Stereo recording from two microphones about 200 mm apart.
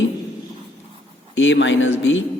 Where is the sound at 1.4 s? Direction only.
70° left (ahead or behind).